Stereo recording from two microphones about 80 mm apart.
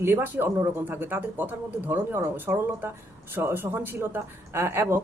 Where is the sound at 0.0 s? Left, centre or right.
Right.